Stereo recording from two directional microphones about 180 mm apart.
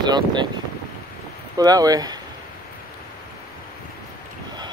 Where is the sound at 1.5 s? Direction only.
20° right (ahead or behind).